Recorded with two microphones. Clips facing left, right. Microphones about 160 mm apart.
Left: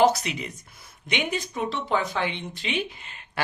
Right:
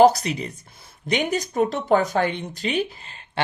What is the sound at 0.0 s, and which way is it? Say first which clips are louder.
Speech: right 5 dB; 35° right (ahead or behind).